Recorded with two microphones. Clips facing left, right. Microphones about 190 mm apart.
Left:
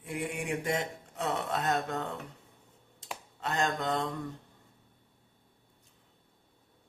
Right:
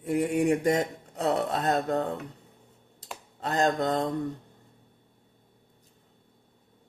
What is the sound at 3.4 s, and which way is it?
Speech, 35° right (ahead or behind).